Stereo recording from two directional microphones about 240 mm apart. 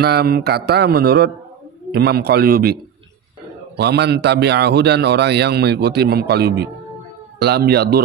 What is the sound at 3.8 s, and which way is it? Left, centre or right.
A man's voice, right.